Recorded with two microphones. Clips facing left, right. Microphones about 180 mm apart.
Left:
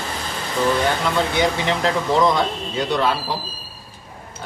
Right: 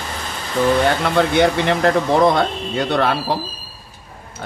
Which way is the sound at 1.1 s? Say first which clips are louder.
Right 5 dB; 60° right (ahead or behind).